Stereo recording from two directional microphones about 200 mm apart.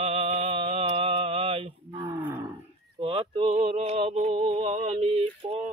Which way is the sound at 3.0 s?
25° right (ahead or behind).